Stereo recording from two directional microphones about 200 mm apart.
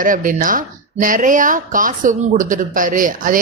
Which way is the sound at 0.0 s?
40° right (ahead or behind).